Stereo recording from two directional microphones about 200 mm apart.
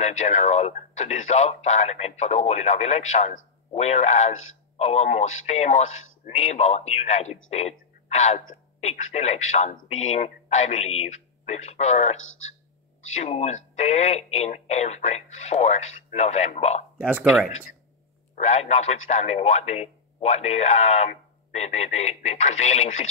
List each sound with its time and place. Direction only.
0.2 s speech: 35° left (ahead or behind)
12.2 s speech: 80° left
13.1 s speech: 35° left (ahead or behind)
17.0 s speech: 5° right (ahead or behind)
17.5 s speech: 35° left (ahead or behind)